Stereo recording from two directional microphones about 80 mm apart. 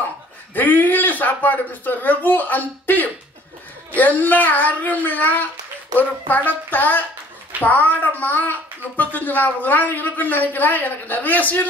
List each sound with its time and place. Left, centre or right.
0.6 s a woman's voice: left